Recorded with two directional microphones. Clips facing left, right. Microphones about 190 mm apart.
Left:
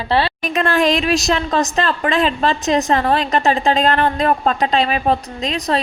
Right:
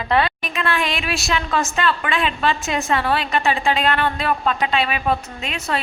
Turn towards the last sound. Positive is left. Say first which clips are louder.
# left 6 dB
turn(degrees=35)  # may be behind; listen again after turning